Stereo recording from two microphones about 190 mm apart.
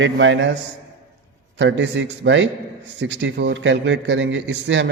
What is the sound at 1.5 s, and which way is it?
A man's voice, 70° right (ahead or behind).